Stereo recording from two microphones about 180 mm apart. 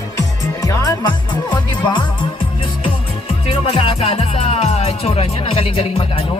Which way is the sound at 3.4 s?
30° left (ahead or behind).